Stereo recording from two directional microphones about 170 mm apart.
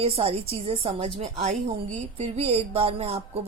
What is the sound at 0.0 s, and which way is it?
A woman's voice, 35° right (ahead or behind).